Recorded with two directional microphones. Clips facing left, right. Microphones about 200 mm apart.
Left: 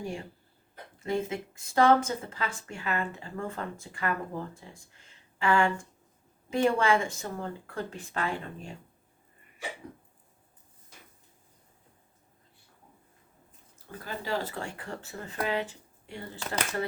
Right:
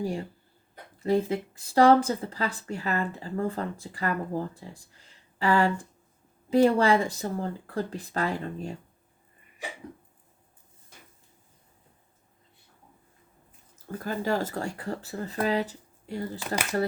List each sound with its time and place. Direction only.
0.0 s speech: 35° right (ahead or behind)
14.0 s speech: 45° right (ahead or behind)